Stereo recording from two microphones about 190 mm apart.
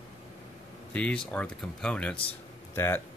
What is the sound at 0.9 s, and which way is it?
Speech, 5° left (ahead or behind).